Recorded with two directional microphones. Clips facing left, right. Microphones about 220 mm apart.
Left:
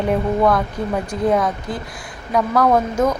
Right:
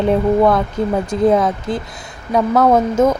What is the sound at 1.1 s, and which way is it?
Speech, 25° right (ahead or behind).